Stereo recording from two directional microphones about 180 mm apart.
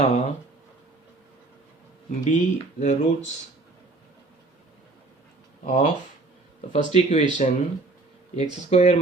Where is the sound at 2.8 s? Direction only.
40° left (ahead or behind).